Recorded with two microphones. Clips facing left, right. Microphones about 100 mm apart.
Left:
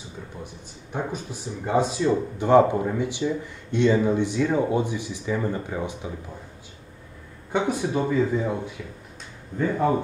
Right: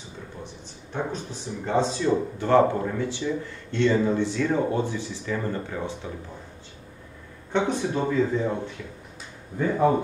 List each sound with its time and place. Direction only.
0.9 s speech: 10° left (ahead or behind)
7.5 s speech: 10° left (ahead or behind)
9.6 s speech: 5° right (ahead or behind)